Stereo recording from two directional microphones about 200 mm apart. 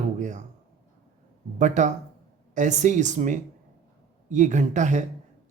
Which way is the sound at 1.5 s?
40° right (ahead or behind).